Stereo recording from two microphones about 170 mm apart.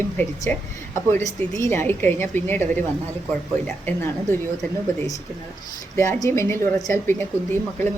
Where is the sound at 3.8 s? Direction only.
15° left (ahead or behind).